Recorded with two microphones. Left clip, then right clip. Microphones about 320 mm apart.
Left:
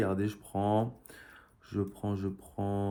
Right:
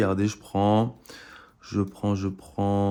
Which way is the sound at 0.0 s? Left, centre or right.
Right.